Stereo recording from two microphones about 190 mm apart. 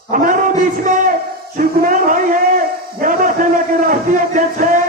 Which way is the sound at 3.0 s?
45° right (ahead or behind).